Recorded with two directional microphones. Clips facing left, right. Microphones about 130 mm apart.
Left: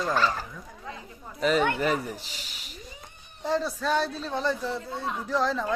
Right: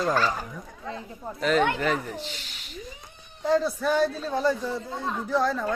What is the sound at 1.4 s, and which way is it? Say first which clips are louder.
Speech: right 1 dB; 5° left (ahead or behind).